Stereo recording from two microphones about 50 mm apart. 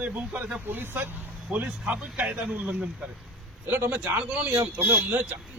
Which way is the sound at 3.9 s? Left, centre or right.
Right.